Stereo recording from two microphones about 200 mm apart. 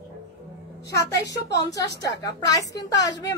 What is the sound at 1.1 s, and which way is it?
Speech, 55° left (ahead or behind).